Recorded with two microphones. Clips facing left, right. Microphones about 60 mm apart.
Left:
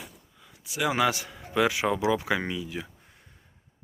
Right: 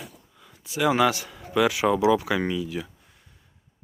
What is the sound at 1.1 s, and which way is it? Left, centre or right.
Speech, centre.